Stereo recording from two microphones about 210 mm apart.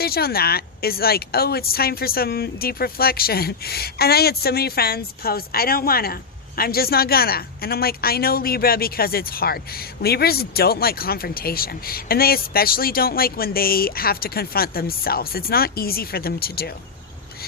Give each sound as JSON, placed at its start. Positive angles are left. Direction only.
{"t": 0.0, "sound": "speech", "side_deg": 45}